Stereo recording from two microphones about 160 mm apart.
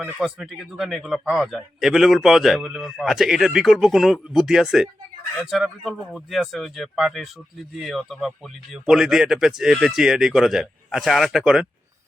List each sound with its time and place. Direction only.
0.2 s a man's voice: centre (ahead or behind)